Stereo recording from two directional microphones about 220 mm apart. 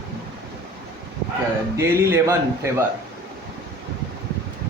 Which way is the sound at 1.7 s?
10° right (ahead or behind).